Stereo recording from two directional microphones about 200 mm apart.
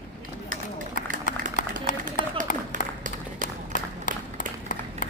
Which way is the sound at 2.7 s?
40° right (ahead or behind).